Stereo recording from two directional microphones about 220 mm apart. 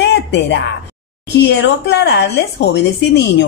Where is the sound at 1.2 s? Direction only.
50° left (ahead or behind).